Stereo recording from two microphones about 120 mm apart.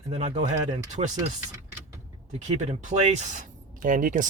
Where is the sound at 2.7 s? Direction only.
75° right (ahead or behind).